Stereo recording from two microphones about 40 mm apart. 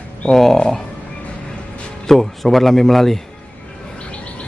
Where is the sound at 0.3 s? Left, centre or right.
Centre.